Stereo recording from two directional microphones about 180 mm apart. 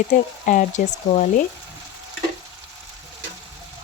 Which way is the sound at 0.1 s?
45° left (ahead or behind).